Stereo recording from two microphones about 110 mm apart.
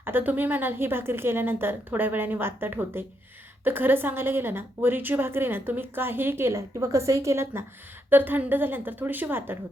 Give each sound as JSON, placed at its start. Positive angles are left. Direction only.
{"t": 0.0, "sound": "a woman's voice", "side_deg": -20}